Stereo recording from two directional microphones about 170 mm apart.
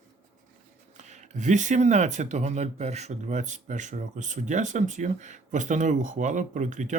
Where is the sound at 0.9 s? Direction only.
45° right (ahead or behind).